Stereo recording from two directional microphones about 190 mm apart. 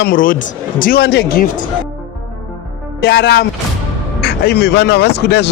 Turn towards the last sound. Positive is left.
turn(degrees=60)  # may be behind; listen again after turning